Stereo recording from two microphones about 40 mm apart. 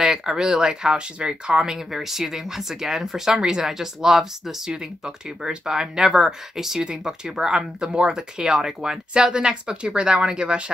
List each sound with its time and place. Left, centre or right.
0.0 s speech: centre